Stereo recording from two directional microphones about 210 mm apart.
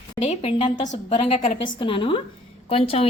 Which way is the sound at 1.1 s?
35° left (ahead or behind).